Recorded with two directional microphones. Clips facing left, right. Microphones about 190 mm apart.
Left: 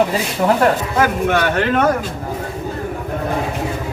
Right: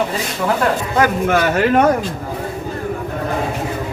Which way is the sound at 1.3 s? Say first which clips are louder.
Right 2 dB; 5° right (ahead or behind).